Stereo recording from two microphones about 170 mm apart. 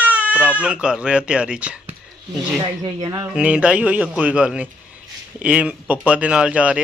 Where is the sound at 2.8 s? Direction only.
20° right (ahead or behind).